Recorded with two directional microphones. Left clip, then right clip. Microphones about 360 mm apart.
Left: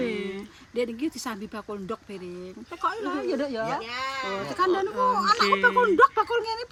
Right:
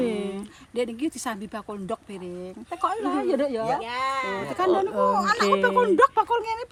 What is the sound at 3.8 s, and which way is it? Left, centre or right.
Speech, right.